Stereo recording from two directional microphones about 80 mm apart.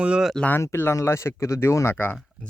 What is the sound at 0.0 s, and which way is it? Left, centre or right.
Speech, centre.